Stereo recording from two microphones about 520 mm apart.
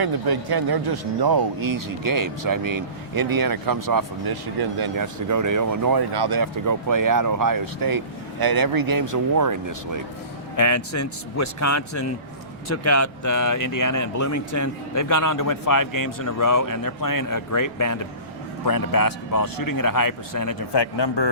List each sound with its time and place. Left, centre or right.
0.0 s speech: right
10.6 s speech: left